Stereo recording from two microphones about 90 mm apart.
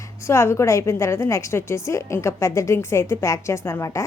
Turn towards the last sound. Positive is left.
turn(degrees=35)  # may be behind; listen again after turning